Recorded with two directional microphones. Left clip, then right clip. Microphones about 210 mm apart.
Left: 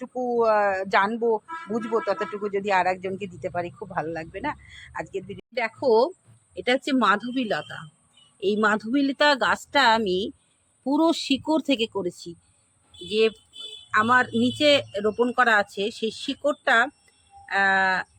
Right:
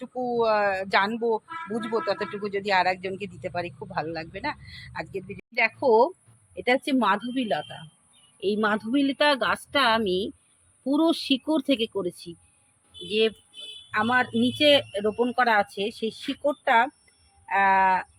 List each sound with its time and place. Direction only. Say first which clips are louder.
0.3 s speech: left 2 dB; 10° left (ahead or behind)